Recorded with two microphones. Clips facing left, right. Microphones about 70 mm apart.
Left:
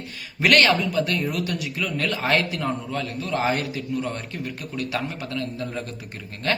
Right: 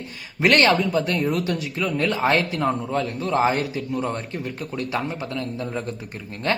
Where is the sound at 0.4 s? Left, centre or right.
Right.